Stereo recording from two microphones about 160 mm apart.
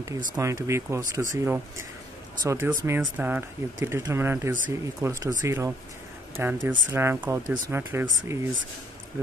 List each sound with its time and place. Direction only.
0.3 s speech: 20° right (ahead or behind)